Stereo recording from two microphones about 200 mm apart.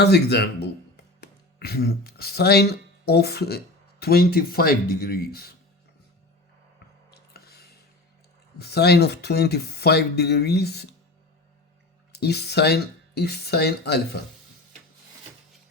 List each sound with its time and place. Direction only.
0.0 s speech: 55° left (ahead or behind)
7.1 s a sound: 50° left (ahead or behind)
8.5 s speech: 55° left (ahead or behind)
12.2 s speech: 55° left (ahead or behind)